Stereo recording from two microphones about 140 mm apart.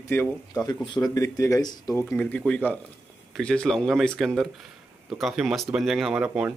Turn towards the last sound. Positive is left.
turn(degrees=-10)  # may be behind; listen again after turning